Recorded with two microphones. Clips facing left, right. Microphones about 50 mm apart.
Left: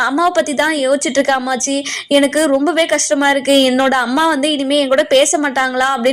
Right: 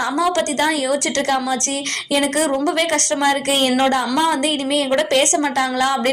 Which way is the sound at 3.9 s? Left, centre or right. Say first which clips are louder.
Left 4 dB; left.